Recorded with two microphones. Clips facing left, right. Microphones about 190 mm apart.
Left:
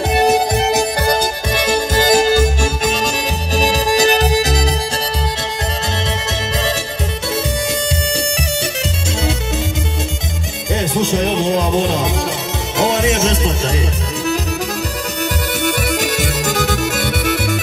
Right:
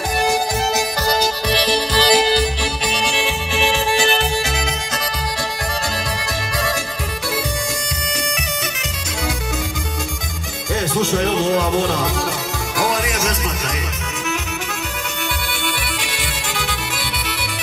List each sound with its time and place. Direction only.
0.1 s music: 25° left (ahead or behind)
0.7 s music: 55° left (ahead or behind); by 4.7 s 40° left (ahead or behind)
10.7 s music: 20° left (ahead or behind)
15.6 s music: 45° left (ahead or behind)